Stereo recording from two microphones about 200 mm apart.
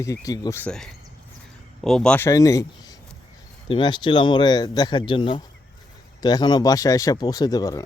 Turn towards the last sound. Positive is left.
turn(degrees=20)  # may be behind; listen again after turning